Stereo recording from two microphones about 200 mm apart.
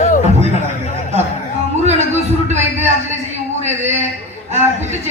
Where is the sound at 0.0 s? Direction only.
35° left (ahead or behind).